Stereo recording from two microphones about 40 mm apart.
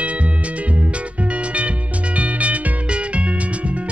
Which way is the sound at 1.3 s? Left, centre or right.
Right.